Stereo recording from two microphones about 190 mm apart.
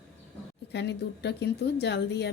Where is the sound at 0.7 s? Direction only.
65° left (ahead or behind).